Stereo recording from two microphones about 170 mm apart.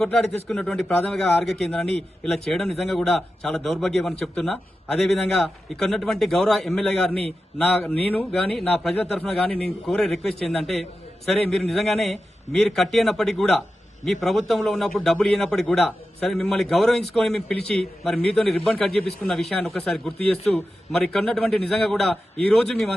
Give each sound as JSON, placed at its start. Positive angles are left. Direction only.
{"t": 0.0, "sound": "a man's voice", "side_deg": 5}